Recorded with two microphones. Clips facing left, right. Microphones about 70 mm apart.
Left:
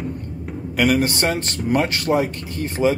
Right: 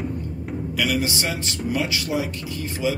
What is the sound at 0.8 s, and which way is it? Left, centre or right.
A man's voice, left.